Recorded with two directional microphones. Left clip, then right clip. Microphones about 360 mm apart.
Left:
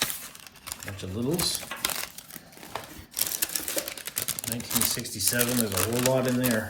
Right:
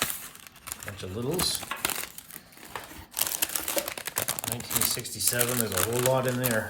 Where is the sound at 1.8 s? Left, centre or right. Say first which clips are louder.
Left 1 dB; centre.